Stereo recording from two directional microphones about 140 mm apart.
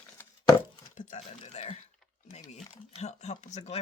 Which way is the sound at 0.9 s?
55° left (ahead or behind).